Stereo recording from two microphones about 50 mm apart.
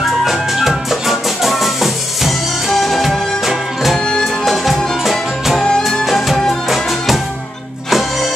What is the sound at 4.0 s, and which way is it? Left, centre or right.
Music, centre.